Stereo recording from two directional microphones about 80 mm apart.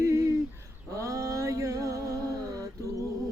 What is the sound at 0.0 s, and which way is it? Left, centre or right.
Bird, right.